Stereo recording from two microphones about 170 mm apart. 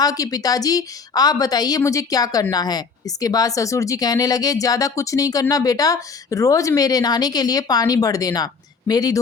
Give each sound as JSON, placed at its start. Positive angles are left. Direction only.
{"t": 0.0, "sound": "a woman's voice", "side_deg": 20}